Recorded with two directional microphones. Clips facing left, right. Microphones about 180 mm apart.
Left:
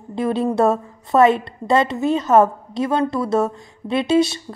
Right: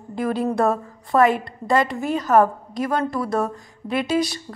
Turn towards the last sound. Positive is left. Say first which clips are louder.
# left 5 dB
turn(degrees=25)  # may be behind; listen again after turning